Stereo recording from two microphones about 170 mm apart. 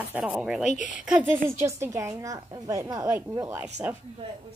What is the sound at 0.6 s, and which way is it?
Speech, 45° left (ahead or behind).